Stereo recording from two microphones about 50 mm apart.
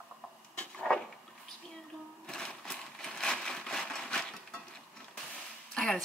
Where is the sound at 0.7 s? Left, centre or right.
Centre.